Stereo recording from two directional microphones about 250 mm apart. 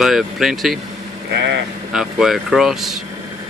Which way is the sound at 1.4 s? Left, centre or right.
Right.